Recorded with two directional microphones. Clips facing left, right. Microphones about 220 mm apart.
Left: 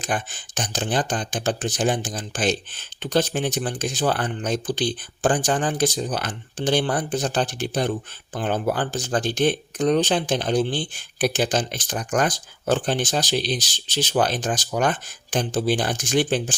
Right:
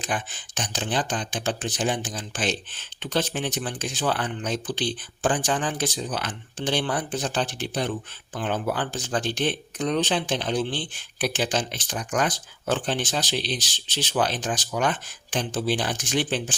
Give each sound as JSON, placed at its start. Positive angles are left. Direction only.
{"t": 0.0, "sound": "speech", "side_deg": 45}